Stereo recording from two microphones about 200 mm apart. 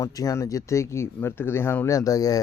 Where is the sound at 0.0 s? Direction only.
15° left (ahead or behind).